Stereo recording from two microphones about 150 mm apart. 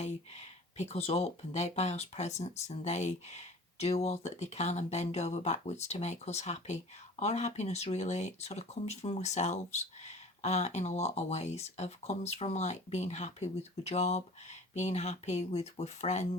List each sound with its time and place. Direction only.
0.0 s speech: 45° left (ahead or behind)